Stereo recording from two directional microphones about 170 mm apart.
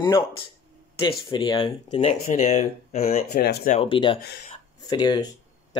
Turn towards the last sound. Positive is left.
turn(degrees=25)  # may be behind; listen again after turning